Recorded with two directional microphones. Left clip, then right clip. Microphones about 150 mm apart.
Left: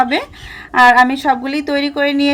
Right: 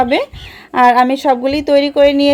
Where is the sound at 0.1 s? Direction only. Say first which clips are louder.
Right 3 dB; 45° right (ahead or behind).